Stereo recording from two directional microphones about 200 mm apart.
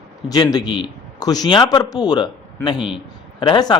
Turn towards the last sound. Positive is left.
turn(degrees=20)  # may be behind; listen again after turning